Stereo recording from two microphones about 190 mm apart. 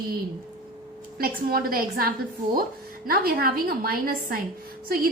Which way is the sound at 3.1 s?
50° right (ahead or behind).